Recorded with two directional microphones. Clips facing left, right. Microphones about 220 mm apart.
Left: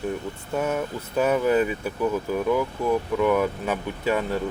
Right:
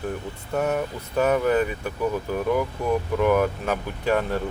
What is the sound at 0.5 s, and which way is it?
Speech, centre (ahead or behind).